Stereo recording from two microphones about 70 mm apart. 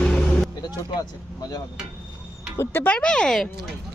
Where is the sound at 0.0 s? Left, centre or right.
Centre.